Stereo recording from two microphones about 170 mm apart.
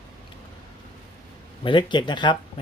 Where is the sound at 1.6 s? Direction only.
25° left (ahead or behind).